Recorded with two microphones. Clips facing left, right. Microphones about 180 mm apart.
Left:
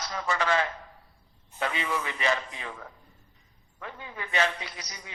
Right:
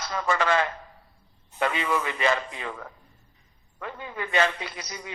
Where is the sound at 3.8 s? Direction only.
65° right (ahead or behind).